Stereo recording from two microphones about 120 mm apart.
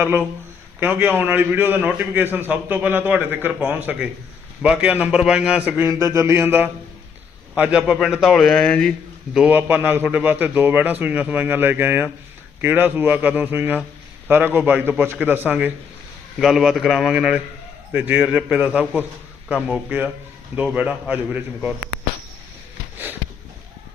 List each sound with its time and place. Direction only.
0.0 s a man's voice: 15° right (ahead or behind)
6.0 s a sound: 25° right (ahead or behind)
7.5 s a man's voice: 10° right (ahead or behind); by 9.0 s 10° left (ahead or behind)
9.3 s a man's voice: 10° right (ahead or behind)
16.4 s a man's voice: 5° right (ahead or behind)